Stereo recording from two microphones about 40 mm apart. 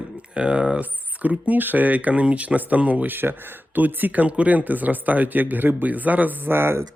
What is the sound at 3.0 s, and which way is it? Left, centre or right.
Speech, right.